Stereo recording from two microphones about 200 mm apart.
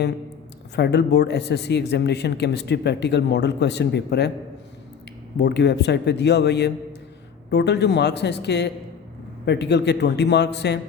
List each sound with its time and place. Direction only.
0.8 s a man's voice: 55° left (ahead or behind)
5.4 s a man's voice: 60° left (ahead or behind)